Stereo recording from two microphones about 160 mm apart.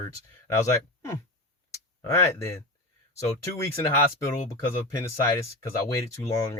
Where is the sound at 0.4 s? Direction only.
20° left (ahead or behind).